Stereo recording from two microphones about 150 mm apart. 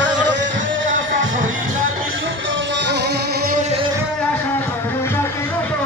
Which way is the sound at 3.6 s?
45° right (ahead or behind).